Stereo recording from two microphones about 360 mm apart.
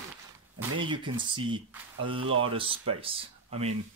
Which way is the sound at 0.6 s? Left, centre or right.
Centre.